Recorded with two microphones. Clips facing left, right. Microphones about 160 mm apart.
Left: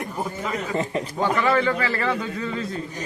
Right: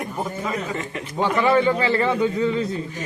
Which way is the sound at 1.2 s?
25° right (ahead or behind).